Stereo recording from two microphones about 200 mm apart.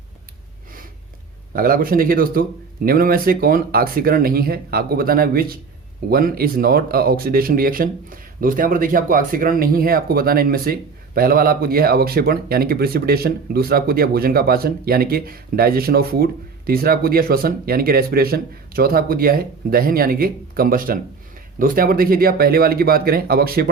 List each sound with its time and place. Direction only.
1.5 s speech: 45° right (ahead or behind)